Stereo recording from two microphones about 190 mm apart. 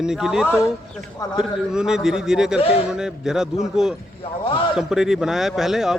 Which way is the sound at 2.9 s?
5° right (ahead or behind).